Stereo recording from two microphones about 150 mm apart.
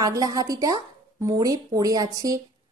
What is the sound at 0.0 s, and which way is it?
A woman's voice, 25° right (ahead or behind).